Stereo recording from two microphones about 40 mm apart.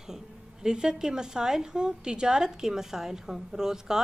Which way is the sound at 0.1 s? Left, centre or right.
Centre.